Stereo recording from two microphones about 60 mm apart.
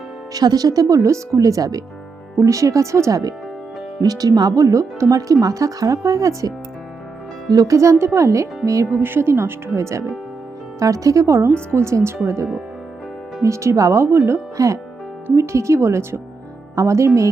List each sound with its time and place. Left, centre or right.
0.3 s speech: right
2.4 s speech: right
4.0 s speech: right
7.5 s speech: right
8.9 s speech: right
13.4 s speech: right
14.5 s speech: right
15.4 s speech: right
16.7 s speech: right